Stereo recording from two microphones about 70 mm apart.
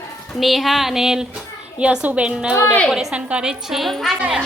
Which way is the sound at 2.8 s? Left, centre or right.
Centre.